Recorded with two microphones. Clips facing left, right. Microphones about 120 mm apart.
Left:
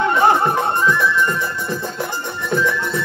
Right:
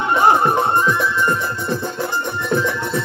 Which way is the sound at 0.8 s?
20° right (ahead or behind).